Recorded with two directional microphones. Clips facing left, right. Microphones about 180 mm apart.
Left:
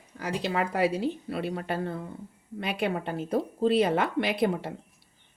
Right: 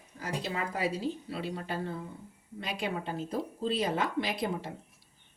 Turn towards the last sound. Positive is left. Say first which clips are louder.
# left 6 dB
turn(degrees=65)  # may be behind; listen again after turning